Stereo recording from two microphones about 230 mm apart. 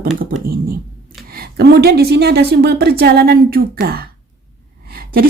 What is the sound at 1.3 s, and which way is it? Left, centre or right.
A woman's voice, right.